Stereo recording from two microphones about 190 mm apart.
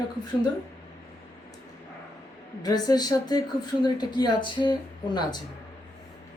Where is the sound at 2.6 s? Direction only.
20° left (ahead or behind).